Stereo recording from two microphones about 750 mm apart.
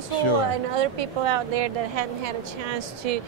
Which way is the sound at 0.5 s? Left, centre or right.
Right.